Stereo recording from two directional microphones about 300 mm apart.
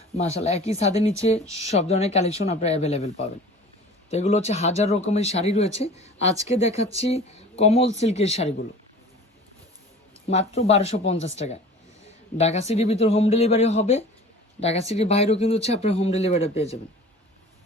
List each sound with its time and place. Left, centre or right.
0.2 s speech: left
10.2 s speech: left
12.4 s speech: left